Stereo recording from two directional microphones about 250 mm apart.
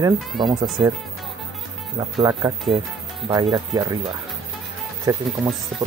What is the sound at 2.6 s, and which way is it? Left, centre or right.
Speech, centre.